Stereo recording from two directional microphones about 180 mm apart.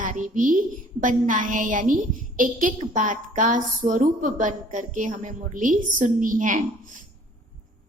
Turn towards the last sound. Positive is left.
turn(degrees=-45)  # may be behind; listen again after turning